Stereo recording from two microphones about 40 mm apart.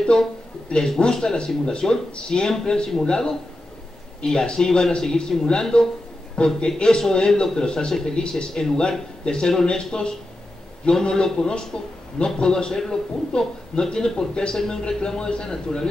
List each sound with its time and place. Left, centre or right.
0.7 s a man's voice: centre